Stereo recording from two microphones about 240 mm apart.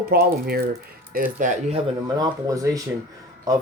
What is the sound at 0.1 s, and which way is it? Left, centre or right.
Speech, right.